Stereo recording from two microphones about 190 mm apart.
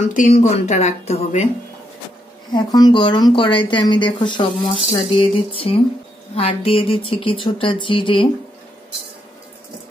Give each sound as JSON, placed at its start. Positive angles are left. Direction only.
{"t": 0.1, "sound": "speech", "side_deg": 40}
{"t": 2.5, "sound": "speech", "side_deg": 20}